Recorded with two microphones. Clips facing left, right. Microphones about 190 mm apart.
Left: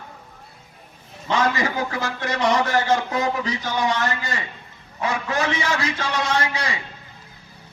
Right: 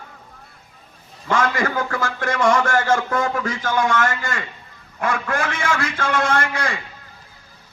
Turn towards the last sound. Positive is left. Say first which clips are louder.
# right 2 dB
turn(degrees=-50)  # may be behind; listen again after turning